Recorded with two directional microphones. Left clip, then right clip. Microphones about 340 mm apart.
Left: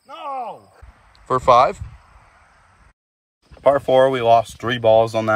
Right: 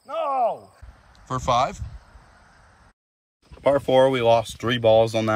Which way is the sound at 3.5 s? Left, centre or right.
Centre.